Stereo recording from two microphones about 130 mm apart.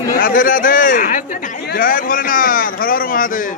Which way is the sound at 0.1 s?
90° left.